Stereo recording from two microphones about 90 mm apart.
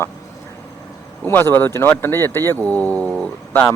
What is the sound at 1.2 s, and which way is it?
Speech, 25° left (ahead or behind).